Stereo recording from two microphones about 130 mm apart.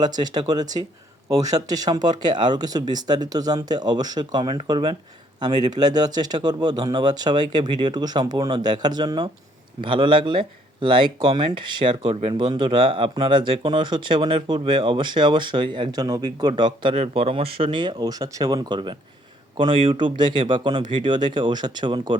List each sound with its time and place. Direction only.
0.0 s speech: 30° right (ahead or behind)
16.9 s speech: 50° right (ahead or behind)